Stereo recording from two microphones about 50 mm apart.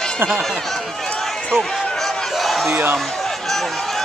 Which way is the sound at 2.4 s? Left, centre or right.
Centre.